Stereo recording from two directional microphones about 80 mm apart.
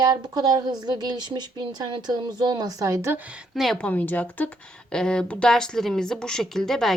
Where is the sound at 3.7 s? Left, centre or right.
Centre.